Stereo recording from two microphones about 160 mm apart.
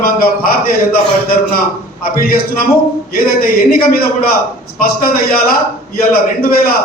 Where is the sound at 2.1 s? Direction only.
65° left (ahead or behind).